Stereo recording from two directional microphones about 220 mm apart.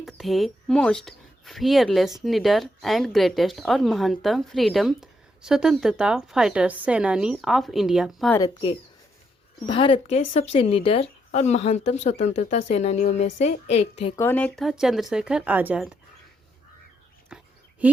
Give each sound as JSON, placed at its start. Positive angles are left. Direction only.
{"t": 0.0, "sound": "speech", "side_deg": 0}
{"t": 9.6, "sound": "speech", "side_deg": 25}
{"t": 14.2, "sound": "speech", "side_deg": 10}
{"t": 17.2, "sound": "a sound", "side_deg": -5}